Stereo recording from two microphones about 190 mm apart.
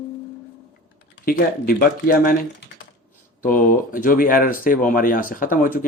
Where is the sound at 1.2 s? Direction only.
50° left (ahead or behind).